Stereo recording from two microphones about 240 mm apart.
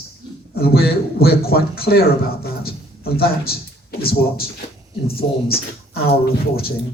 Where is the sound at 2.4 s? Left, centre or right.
Left.